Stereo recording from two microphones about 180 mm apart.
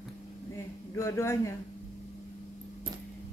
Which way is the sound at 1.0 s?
15° left (ahead or behind).